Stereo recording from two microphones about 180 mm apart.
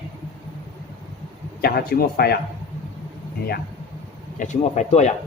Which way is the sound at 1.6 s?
60° left (ahead or behind).